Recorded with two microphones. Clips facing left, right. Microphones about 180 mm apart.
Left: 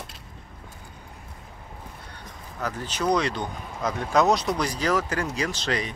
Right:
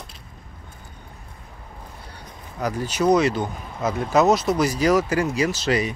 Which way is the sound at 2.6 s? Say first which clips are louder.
Right 6 dB; 10° right (ahead or behind).